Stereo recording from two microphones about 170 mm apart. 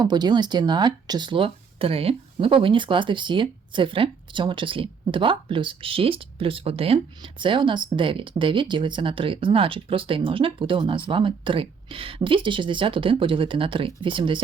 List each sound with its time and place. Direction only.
0.0 s speech: 25° right (ahead or behind)